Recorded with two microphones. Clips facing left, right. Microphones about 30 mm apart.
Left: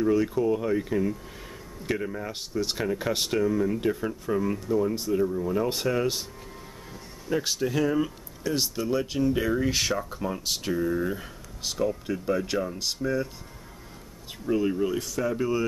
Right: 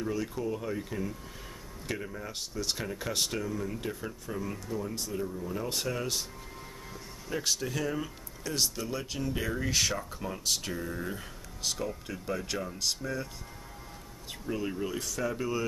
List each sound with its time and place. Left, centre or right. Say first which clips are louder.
0.0 s speech: left 10 dB; centre
7.2 s speech: left 6 dB; centre
14.4 s speech: left 9 dB; centre